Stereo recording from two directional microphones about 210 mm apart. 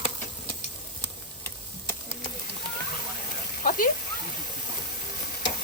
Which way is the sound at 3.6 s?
40° left (ahead or behind).